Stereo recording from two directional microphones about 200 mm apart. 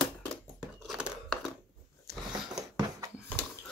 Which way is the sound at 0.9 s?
Centre (ahead or behind).